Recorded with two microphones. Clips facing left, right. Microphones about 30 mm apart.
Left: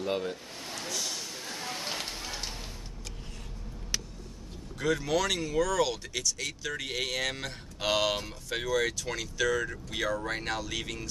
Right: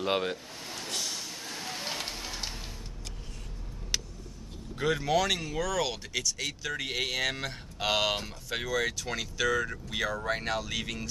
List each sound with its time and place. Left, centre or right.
0.0 s speech: right
1.0 s music: centre
4.7 s speech: right